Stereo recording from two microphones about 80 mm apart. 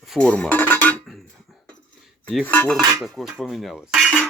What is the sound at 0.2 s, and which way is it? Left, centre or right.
Music, centre.